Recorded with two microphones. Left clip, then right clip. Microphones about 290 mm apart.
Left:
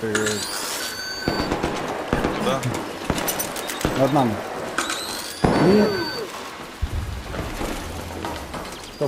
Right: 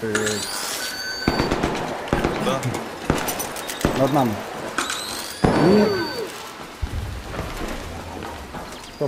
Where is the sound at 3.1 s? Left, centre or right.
Right.